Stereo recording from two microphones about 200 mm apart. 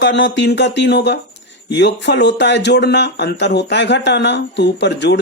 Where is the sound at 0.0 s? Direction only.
65° left (ahead or behind).